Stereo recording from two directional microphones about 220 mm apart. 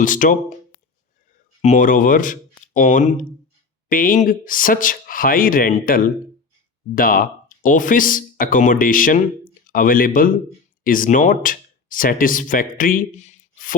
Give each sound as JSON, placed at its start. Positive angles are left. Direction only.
{"t": 0.0, "sound": "speech", "side_deg": 35}
{"t": 1.6, "sound": "speech", "side_deg": 35}